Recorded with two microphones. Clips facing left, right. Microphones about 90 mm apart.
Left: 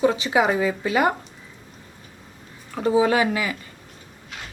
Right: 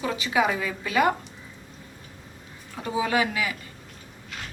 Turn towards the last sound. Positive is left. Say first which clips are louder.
# left 5 dB
turn(degrees=40)  # may be behind; listen again after turning